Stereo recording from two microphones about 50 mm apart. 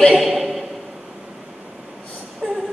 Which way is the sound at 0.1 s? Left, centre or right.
Centre.